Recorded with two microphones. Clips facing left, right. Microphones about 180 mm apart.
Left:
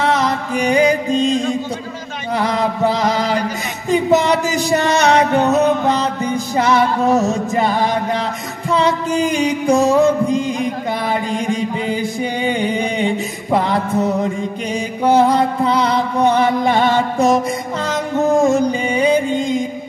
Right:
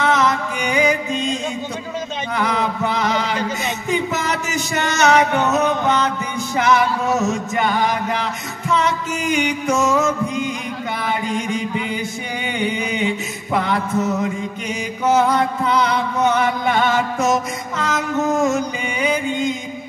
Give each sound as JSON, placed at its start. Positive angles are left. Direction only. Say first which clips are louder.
{"t": 0.0, "sound": "music", "louder": "left 1 dB", "side_deg": 35}
{"t": 2.3, "sound": "chant", "louder": "left 4 dB", "side_deg": 35}
{"t": 3.9, "sound": "music", "louder": "left 9 dB", "side_deg": 35}